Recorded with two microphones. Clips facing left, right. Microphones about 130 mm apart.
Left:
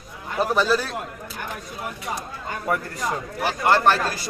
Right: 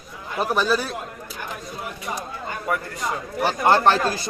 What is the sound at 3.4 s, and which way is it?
Speech, 25° right (ahead or behind).